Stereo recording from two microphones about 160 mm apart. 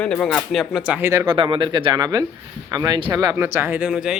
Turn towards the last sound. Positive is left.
turn(degrees=-5)  # may be behind; listen again after turning